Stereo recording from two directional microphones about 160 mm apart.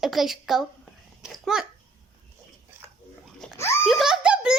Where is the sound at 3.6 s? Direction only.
15° left (ahead or behind).